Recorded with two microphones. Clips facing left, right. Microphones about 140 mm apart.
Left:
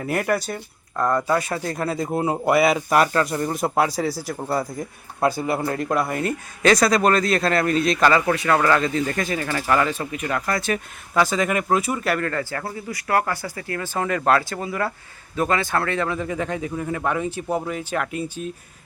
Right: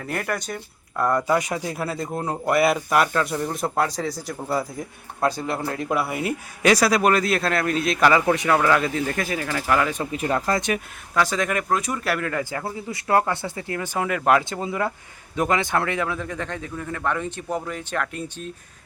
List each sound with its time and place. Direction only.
0.0 s speech: 5° left (ahead or behind)
1.1 s speech: 15° right (ahead or behind)
2.1 s a man's voice: 10° left (ahead or behind)
10.1 s speech: 30° right (ahead or behind)
11.1 s a man's voice: centre (ahead or behind)
12.4 s speech: 15° right (ahead or behind)
16.0 s a man's voice: 5° left (ahead or behind)